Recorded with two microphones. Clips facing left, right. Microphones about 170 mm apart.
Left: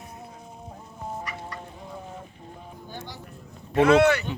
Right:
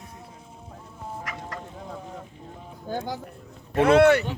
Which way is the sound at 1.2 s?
90° right.